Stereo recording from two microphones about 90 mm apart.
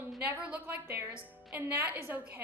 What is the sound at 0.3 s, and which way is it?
A woman's voice, 15° right (ahead or behind).